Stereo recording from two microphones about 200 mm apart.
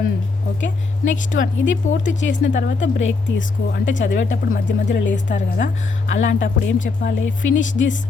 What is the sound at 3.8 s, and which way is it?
Speech, 65° left (ahead or behind).